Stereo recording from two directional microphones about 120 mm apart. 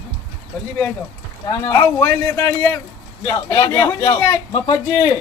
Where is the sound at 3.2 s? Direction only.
35° left (ahead or behind).